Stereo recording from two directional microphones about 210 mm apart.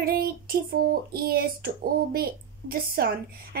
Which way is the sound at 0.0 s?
45° right (ahead or behind).